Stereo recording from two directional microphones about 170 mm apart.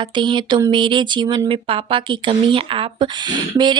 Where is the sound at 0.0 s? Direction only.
30° right (ahead or behind).